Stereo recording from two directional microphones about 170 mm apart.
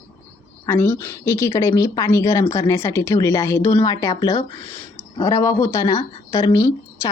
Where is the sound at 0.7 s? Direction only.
15° left (ahead or behind).